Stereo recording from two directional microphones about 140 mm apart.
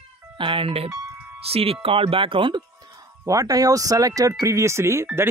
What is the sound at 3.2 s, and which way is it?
Speech, 25° right (ahead or behind).